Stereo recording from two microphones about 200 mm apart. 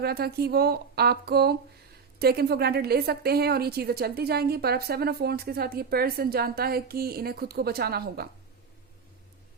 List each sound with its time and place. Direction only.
0.0 s a woman's voice: 50° right (ahead or behind)